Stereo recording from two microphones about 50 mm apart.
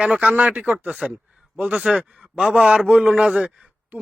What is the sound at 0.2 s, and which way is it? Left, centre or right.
Speech, right.